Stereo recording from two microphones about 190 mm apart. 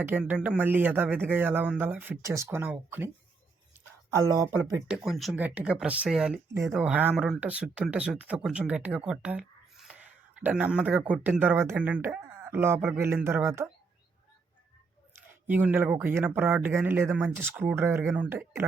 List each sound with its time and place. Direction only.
0.0 s speech: 10° right (ahead or behind)
4.1 s speech: 15° right (ahead or behind)
4.9 s speech: centre (ahead or behind)
15.4 s speech: 10° right (ahead or behind)